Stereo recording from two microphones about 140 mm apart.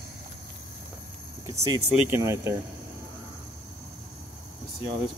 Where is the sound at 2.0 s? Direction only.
15° right (ahead or behind).